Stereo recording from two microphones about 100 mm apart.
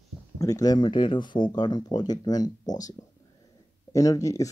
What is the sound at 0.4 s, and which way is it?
Speech, 35° left (ahead or behind).